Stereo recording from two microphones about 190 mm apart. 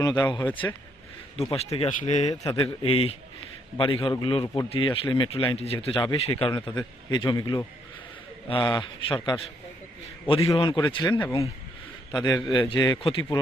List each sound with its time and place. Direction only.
0.0 s a man's voice: 20° left (ahead or behind)
1.4 s a man's voice: 30° left (ahead or behind)
10.5 s a man's voice: 20° left (ahead or behind)